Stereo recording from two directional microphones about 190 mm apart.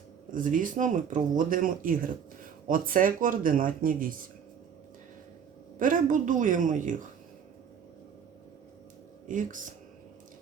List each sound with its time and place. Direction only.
0.3 s speech: 45° right (ahead or behind)
5.8 s speech: 45° right (ahead or behind)
9.3 s speech: 45° right (ahead or behind)